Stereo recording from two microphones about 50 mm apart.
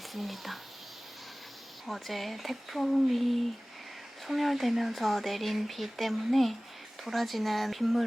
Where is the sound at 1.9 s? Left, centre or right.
Centre.